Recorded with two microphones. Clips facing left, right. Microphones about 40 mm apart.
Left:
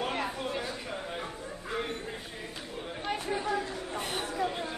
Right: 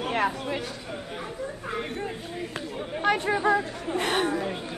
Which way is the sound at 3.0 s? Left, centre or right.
Right.